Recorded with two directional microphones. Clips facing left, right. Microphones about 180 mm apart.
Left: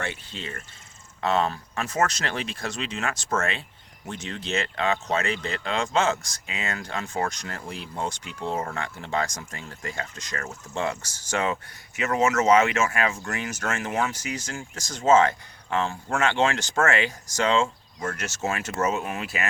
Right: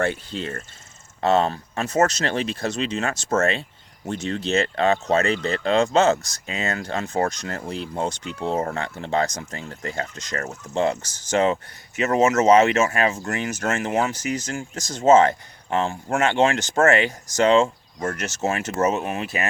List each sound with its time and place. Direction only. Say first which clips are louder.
0.0 s speech: right 9 dB; 45° right (ahead or behind)
1.2 s speech: right 5 dB; 30° right (ahead or behind)
12.4 s speech: right 4 dB; 35° right (ahead or behind)
13.9 s speech: right 4 dB; 20° right (ahead or behind)
14.3 s speech: right 6 dB; 40° right (ahead or behind)
14.8 s speech: right 5 dB; 20° right (ahead or behind)
15.0 s speech: right 4 dB; 35° right (ahead or behind)
16.4 s speech: right 4 dB; 25° right (ahead or behind)
16.7 s speech: right 5 dB; 40° right (ahead or behind)
18.9 s speech: right 4 dB; 25° right (ahead or behind)